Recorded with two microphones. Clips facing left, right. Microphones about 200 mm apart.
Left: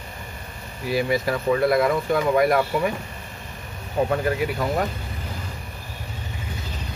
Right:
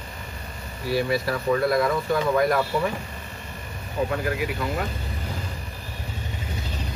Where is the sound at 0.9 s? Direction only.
20° left (ahead or behind).